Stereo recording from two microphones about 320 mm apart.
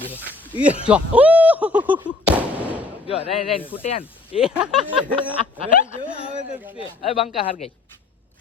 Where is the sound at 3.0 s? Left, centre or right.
Centre.